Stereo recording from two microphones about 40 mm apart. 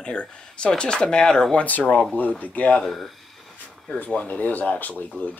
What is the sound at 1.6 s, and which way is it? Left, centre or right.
Speech, left.